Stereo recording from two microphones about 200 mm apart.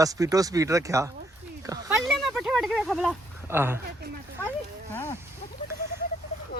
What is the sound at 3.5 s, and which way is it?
Speech, 10° right (ahead or behind).